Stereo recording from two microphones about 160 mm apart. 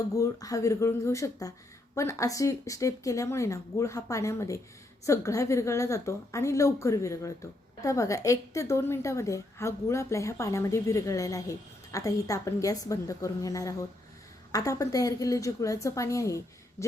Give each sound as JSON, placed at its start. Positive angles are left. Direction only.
{"t": 0.2, "sound": "a woman's voice", "side_deg": 20}